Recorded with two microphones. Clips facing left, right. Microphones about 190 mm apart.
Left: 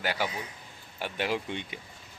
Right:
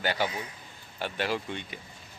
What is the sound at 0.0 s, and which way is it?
Speech, 5° left (ahead or behind).